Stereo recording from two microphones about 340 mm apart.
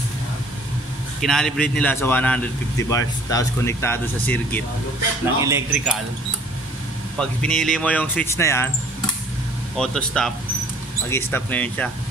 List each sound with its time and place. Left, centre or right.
1.2 s speech: centre
5.4 s speech: centre
7.2 s speech: centre
9.8 s speech: centre